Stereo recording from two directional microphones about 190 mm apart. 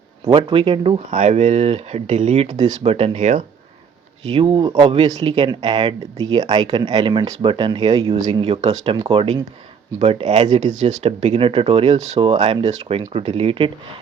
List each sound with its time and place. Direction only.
0.3 s speech: 25° right (ahead or behind)
5.5 s speech: 25° right (ahead or behind)